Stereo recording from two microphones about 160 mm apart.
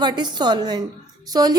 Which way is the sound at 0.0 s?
25° right (ahead or behind).